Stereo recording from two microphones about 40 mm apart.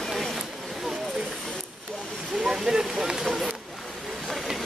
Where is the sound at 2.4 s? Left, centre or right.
Centre.